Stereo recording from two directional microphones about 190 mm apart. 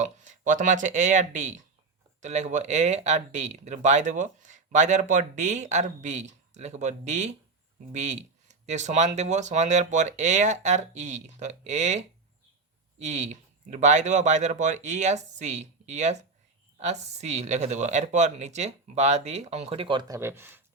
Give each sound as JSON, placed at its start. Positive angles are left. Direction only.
{"t": 0.0, "sound": "speech", "side_deg": -40}
{"t": 20.1, "sound": "speech", "side_deg": -10}